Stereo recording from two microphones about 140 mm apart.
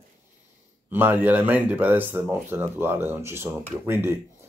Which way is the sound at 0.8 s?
15° right (ahead or behind).